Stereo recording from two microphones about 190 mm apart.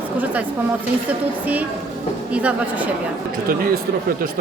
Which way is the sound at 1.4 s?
10° right (ahead or behind).